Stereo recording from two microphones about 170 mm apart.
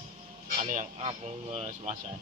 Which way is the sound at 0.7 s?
45° right (ahead or behind).